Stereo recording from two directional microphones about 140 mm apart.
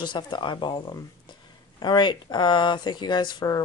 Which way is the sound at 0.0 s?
35° left (ahead or behind).